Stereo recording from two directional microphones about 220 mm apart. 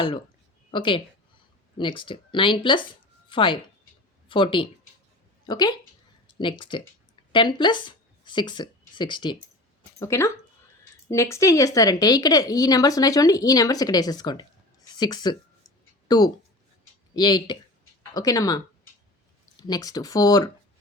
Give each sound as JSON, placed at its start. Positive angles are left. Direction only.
{"t": 0.7, "sound": "a woman's voice", "side_deg": 20}